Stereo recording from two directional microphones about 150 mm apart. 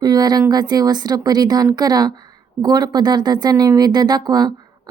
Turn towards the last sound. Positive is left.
turn(degrees=-25)  # may be behind; listen again after turning